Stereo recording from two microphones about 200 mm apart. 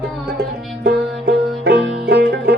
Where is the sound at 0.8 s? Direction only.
55° right (ahead or behind).